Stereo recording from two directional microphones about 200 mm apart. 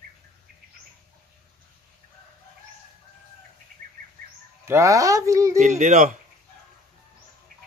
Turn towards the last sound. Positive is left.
turn(degrees=-40)  # may be behind; listen again after turning